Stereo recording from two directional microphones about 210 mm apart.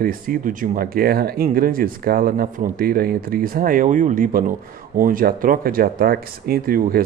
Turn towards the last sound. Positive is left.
turn(degrees=-45)  # may be behind; listen again after turning